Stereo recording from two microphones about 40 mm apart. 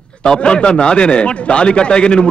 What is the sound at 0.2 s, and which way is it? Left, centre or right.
A man's voice, left.